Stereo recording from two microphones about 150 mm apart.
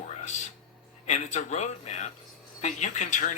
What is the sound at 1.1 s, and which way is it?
Speech, 50° left (ahead or behind).